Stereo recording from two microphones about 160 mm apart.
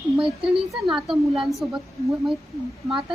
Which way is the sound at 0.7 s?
Centre (ahead or behind).